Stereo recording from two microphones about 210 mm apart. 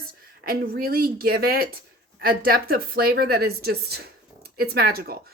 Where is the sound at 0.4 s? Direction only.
45° right (ahead or behind).